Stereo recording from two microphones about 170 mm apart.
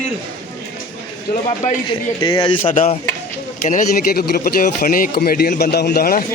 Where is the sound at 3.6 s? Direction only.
55° left (ahead or behind).